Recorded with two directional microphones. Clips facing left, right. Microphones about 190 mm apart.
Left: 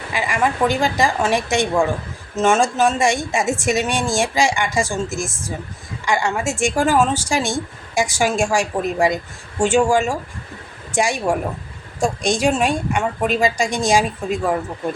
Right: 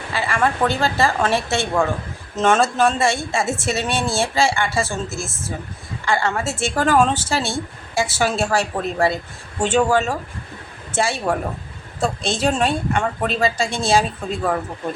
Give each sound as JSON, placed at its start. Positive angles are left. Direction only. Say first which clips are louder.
{"t": 0.1, "sound": "a woman's voice", "louder": "even", "side_deg": 15}